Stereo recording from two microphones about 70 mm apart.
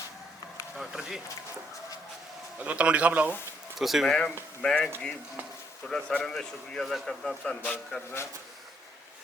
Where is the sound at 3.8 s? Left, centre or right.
Centre.